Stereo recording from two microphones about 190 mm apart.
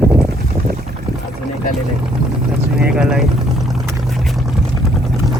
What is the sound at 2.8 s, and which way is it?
Boat, 5° right (ahead or behind).